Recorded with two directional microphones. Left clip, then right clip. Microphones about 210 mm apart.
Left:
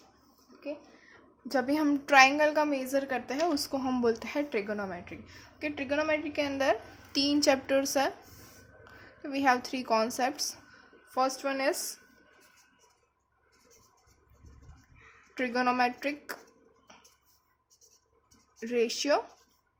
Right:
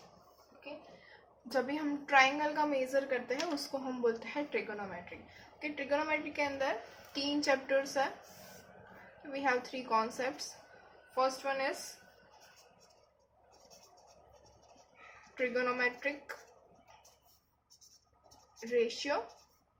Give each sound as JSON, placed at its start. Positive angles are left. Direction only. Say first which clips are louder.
{"t": 1.5, "sound": "a woman's voice", "louder": "left 6 dB", "side_deg": 40}
{"t": 9.3, "sound": "a woman's voice", "louder": "left 6 dB", "side_deg": 50}
{"t": 15.4, "sound": "a woman's voice", "louder": "left 5 dB", "side_deg": 50}
{"t": 18.7, "sound": "a woman's voice", "louder": "left 5 dB", "side_deg": 50}